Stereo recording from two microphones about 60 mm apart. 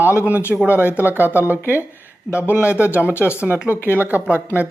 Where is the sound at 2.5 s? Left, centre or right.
Right.